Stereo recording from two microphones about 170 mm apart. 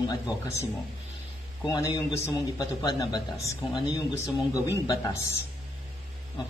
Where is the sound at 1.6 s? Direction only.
20° left (ahead or behind).